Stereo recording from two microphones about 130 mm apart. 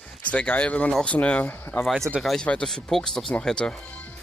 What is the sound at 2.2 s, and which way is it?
Speech, 5° left (ahead or behind).